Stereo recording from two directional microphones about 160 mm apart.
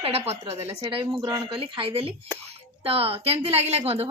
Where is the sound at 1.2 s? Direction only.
20° right (ahead or behind).